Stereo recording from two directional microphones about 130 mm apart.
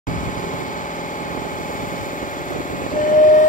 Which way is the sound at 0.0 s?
90° left.